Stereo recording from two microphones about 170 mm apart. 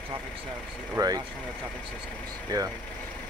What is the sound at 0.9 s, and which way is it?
Speech, 20° right (ahead or behind).